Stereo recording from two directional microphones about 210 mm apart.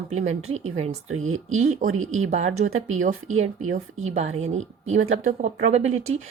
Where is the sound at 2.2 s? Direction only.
30° right (ahead or behind).